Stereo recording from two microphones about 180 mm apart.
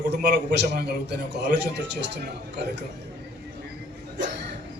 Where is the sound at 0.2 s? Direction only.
70° right (ahead or behind).